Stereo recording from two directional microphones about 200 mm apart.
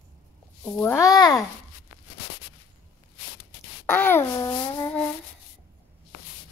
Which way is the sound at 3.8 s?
10° left (ahead or behind).